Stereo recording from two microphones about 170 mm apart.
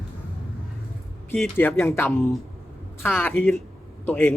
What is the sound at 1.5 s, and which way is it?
A man's voice, 15° left (ahead or behind).